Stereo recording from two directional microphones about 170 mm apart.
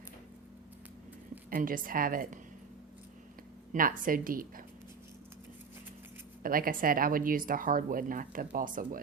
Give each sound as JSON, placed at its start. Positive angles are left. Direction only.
{"t": 1.5, "sound": "speech", "side_deg": -55}
{"t": 3.7, "sound": "speech", "side_deg": -55}
{"t": 6.4, "sound": "speech", "side_deg": -55}